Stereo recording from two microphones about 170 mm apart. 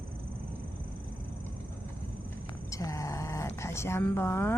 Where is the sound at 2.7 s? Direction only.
20° left (ahead or behind).